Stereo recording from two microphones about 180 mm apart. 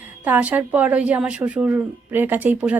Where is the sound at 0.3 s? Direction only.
10° right (ahead or behind).